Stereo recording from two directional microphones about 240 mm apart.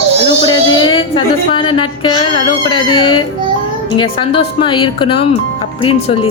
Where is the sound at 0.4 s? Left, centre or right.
Centre.